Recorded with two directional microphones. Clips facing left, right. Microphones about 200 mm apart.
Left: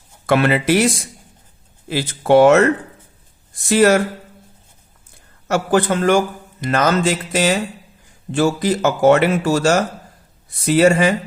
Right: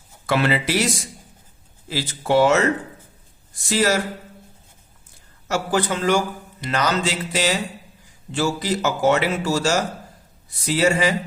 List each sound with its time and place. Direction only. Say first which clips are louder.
0.3 s a man's voice: left 5 dB; 55° left (ahead or behind)
1.9 s a man's voice: left 6 dB; 55° left (ahead or behind)
3.7 s a man's voice: left 7 dB; 55° left (ahead or behind)
5.5 s a man's voice: left 5 dB; 55° left (ahead or behind)